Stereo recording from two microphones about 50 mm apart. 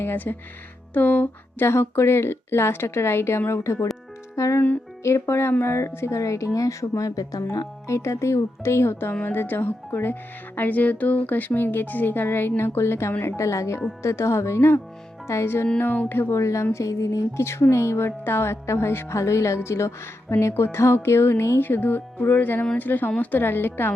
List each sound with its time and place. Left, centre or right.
0.0 s speech: left
1.6 s a woman's voice: left
4.4 s speech: left
9.2 s speech: left
13.2 s speech: left
14.0 s a woman's voice: left
16.0 s speech: left
16.3 s speech: left
16.7 s speech: left
18.6 s speech: left
20.5 s a woman's voice: left
21.6 s speech: left
23.4 s speech: left